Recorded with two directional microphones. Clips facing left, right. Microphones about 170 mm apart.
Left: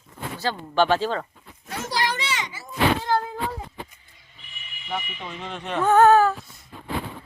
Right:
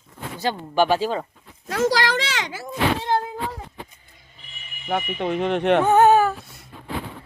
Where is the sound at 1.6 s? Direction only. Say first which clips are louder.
Right 6 dB; 90° right.